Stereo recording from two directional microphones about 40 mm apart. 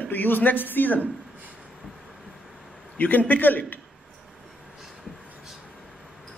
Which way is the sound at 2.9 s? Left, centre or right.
Left.